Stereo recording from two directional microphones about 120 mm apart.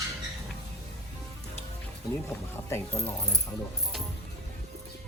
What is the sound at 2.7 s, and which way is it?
Speech, 20° left (ahead or behind).